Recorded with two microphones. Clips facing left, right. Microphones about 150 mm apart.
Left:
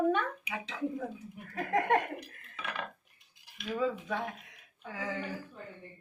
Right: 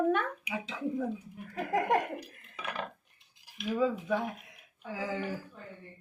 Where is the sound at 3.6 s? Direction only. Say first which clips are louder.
Right 3 dB; 15° right (ahead or behind).